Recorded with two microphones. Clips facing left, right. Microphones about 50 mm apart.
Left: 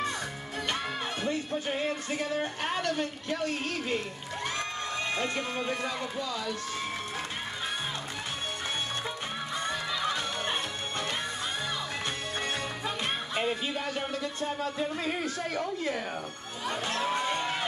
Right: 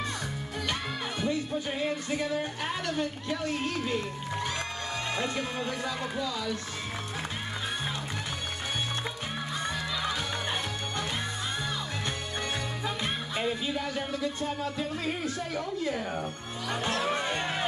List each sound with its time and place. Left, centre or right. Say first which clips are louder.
1.2 s speech: right 2 dB; left
3.8 s speech: right 1 dB; left
10.0 s music: left 1 dB; left
13.3 s music: even; left
13.8 s speech: right 1 dB; left
16.7 s speech: right 1 dB; right